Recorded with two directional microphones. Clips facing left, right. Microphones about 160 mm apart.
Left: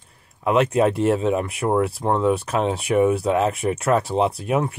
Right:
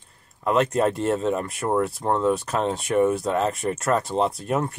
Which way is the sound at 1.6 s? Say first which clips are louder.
Left 2 dB; 25° left (ahead or behind).